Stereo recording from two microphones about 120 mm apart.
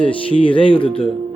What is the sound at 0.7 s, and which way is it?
Speech, 50° left (ahead or behind).